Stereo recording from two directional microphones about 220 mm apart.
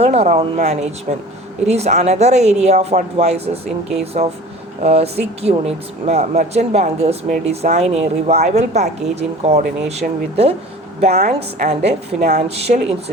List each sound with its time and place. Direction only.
0.0 s a woman's voice: 30° right (ahead or behind)